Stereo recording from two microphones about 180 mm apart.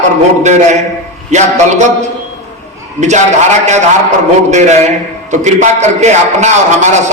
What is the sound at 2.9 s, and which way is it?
Speech, 40° right (ahead or behind).